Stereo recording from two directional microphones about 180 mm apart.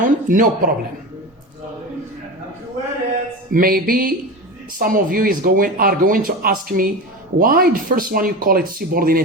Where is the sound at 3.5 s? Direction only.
55° right (ahead or behind).